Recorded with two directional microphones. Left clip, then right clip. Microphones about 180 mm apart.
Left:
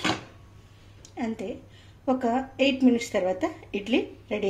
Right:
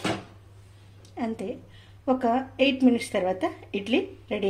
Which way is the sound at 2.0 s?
Centre (ahead or behind).